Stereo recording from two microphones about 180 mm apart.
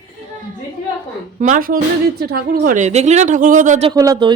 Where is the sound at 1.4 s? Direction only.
45° right (ahead or behind).